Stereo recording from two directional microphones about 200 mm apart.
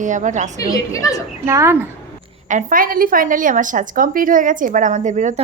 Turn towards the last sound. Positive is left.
turn(degrees=-40)  # may be behind; listen again after turning